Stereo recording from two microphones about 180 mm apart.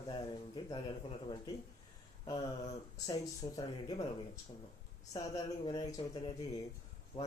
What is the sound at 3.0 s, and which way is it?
Speech, 20° left (ahead or behind).